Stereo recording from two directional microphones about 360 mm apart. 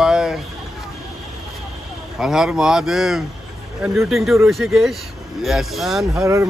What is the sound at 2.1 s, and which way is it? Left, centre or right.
Speech, centre.